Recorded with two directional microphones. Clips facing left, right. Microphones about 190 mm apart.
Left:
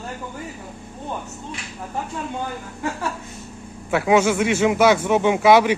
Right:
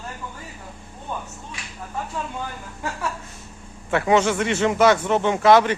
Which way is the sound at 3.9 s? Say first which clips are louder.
Left 2 dB; 5° left (ahead or behind).